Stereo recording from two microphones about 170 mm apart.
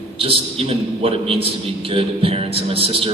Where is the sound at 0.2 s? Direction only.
35° right (ahead or behind).